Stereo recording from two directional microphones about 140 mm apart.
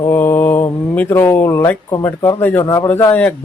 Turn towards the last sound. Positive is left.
turn(degrees=15)  # may be behind; listen again after turning